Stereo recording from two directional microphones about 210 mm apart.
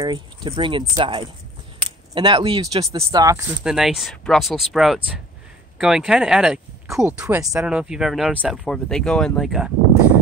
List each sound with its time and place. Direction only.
0.0 s speech: 20° right (ahead or behind)
3.6 s speech: centre (ahead or behind)